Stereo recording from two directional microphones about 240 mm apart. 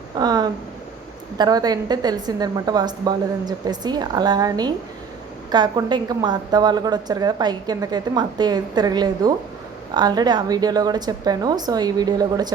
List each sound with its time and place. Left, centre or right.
0.2 s a woman's voice: centre